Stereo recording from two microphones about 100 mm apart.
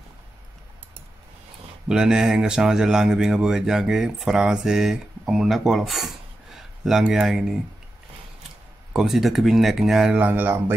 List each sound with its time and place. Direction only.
1.9 s speech: 5° right (ahead or behind)
8.9 s speech: 5° right (ahead or behind)
10.1 s speech: 15° right (ahead or behind)